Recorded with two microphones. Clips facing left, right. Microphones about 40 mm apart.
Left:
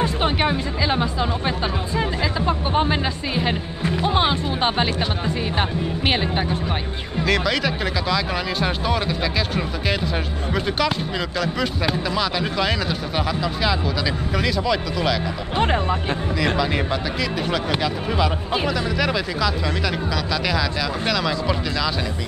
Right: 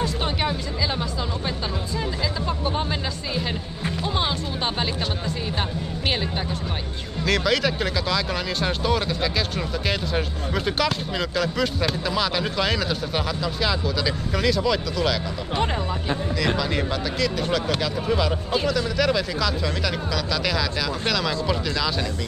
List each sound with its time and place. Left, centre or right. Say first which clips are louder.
0.0 s speech: left 4 dB; left
7.2 s speech: even; centre
15.5 s speech: left 5 dB; left
16.3 s speech: left 4 dB; centre